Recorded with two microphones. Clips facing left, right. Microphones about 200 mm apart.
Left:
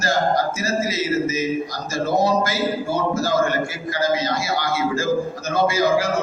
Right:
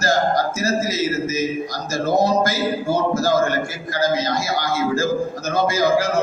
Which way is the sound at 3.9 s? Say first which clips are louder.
Right 2 dB; 45° right (ahead or behind).